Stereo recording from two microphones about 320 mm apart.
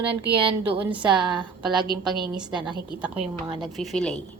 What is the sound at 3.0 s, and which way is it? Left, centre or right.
A woman's voice, centre.